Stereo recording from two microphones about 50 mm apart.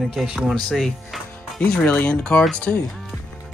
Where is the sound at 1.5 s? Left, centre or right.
Centre.